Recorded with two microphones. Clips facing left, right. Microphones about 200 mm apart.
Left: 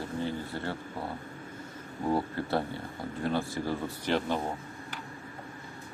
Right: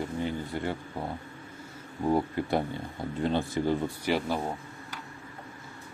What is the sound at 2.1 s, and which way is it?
Speech, 15° right (ahead or behind).